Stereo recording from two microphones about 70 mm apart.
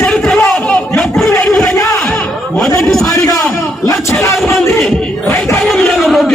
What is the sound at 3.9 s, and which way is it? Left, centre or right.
Speech, left.